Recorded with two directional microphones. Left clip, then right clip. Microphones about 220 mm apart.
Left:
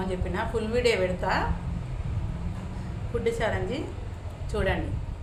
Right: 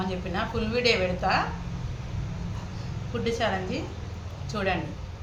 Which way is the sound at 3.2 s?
15° left (ahead or behind).